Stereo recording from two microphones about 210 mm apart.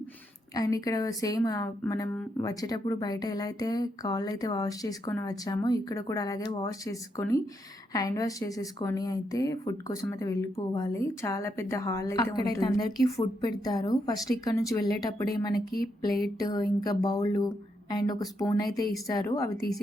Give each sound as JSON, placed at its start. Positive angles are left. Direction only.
{"t": 0.5, "sound": "speech", "side_deg": 15}
{"t": 15.5, "sound": "speech", "side_deg": 45}
{"t": 16.4, "sound": "speech", "side_deg": 15}